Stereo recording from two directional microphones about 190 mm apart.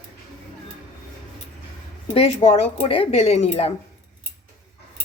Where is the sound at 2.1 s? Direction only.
30° left (ahead or behind).